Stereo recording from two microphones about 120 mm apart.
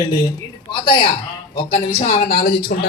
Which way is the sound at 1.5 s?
50° left (ahead or behind).